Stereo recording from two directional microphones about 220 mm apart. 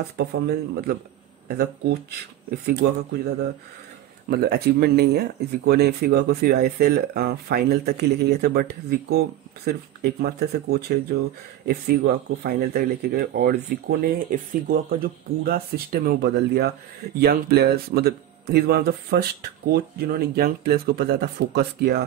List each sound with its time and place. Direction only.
0.2 s speech: 45° right (ahead or behind)
4.3 s speech: 45° right (ahead or behind)